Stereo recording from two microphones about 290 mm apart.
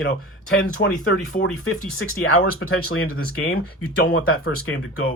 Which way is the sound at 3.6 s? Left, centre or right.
Left.